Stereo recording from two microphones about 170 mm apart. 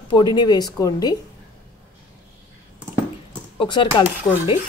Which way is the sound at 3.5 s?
25° left (ahead or behind).